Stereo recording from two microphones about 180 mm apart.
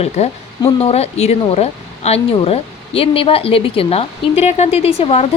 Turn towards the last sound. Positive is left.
turn(degrees=35)  # may be behind; listen again after turning